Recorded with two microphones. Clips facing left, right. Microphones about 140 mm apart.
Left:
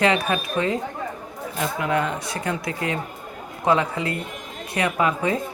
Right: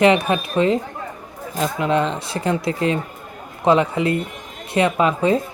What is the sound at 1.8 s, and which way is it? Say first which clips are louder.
Speech: right 4 dB; 25° right (ahead or behind).